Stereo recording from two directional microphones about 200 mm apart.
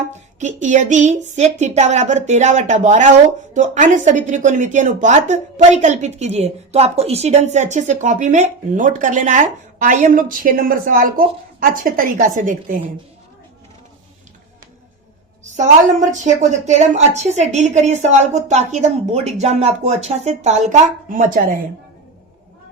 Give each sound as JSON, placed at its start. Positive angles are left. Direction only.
{"t": 0.3, "sound": "a woman's voice", "side_deg": -35}
{"t": 15.5, "sound": "speech", "side_deg": -40}